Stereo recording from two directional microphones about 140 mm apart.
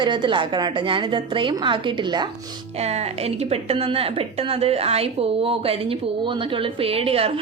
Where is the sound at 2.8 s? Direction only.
50° right (ahead or behind).